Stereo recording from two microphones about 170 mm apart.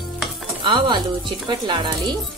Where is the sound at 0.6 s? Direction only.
30° right (ahead or behind).